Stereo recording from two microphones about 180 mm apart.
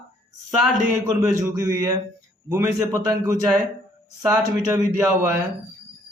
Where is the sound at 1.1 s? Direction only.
20° right (ahead or behind).